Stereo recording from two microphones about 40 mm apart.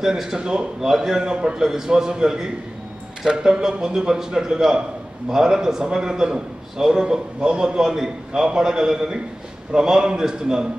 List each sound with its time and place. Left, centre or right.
0.0 s a man's voice: centre
1.6 s a man's voice: centre